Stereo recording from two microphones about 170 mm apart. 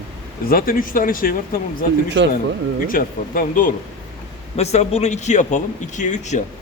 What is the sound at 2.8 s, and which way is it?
Speech, 55° left (ahead or behind).